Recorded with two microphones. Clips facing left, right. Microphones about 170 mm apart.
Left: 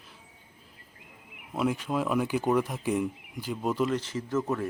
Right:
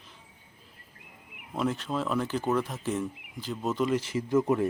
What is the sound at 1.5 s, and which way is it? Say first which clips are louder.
Speech: left 1 dB; 10° left (ahead or behind).